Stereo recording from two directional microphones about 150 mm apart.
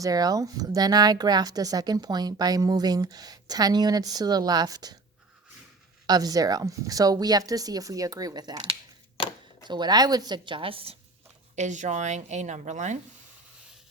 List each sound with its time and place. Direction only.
0.0 s speech: 25° right (ahead or behind)
6.1 s speech: 25° right (ahead or behind)
11.5 s a woman's voice: 50° right (ahead or behind)